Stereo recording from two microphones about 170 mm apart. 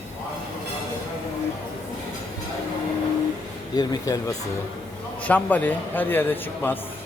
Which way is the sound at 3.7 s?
20° left (ahead or behind).